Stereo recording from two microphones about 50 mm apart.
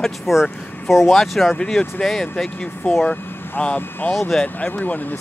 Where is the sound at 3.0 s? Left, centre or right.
Left.